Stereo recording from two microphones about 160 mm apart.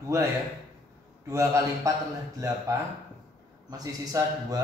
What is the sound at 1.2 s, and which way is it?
Speech, 20° right (ahead or behind).